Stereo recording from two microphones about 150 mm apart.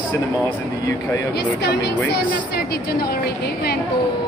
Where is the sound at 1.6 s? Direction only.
90° left.